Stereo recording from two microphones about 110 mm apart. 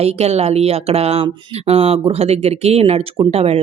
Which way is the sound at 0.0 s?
70° right (ahead or behind).